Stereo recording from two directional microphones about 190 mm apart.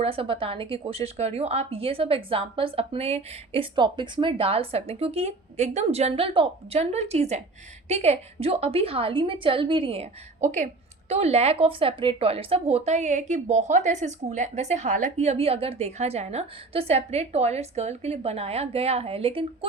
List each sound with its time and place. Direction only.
0.0 s a woman's voice: 30° right (ahead or behind)